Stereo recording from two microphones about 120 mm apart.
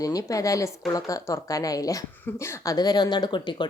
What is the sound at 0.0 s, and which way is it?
Speech, 30° left (ahead or behind).